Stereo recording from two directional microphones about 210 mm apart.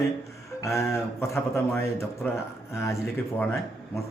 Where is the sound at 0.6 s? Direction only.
15° left (ahead or behind).